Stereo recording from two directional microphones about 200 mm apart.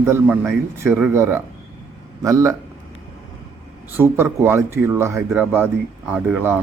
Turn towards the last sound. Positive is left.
turn(degrees=-10)  # may be behind; listen again after turning